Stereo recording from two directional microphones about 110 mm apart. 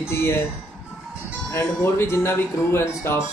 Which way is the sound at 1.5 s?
25° left (ahead or behind).